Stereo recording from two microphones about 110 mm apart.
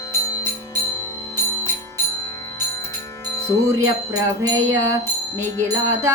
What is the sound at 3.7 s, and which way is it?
Wind chime, 30° right (ahead or behind).